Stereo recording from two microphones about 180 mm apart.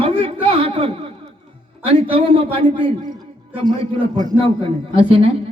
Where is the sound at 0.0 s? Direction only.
30° right (ahead or behind).